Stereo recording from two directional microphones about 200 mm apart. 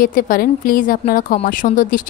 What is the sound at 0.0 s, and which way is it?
Speech, 45° left (ahead or behind).